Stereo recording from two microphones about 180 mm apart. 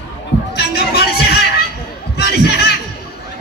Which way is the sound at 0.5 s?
65° left (ahead or behind).